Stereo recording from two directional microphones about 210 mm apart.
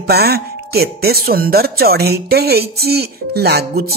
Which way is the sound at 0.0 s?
50° right (ahead or behind).